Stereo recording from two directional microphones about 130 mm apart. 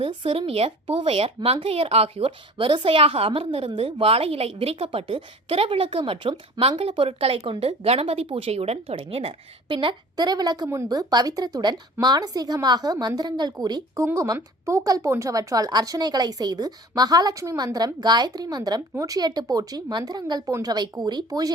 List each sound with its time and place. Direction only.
0.0 s speech: 40° right (ahead or behind)